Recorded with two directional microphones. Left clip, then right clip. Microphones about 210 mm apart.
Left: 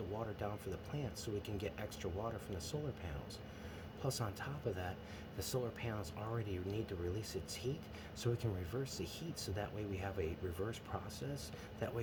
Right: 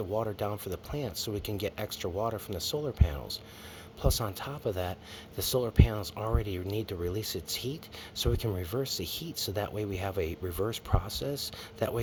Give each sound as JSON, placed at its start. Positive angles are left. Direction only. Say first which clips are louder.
{"t": 0.2, "sound": "speech", "louder": "right 11 dB", "side_deg": -55}